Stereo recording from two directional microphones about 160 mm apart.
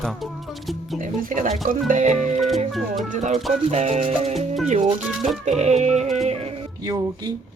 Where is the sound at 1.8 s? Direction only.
50° right (ahead or behind).